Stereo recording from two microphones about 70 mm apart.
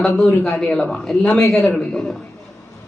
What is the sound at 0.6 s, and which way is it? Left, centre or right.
Speech, centre.